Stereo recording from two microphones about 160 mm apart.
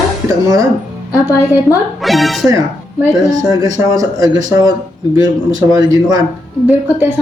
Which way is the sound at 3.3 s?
25° right (ahead or behind).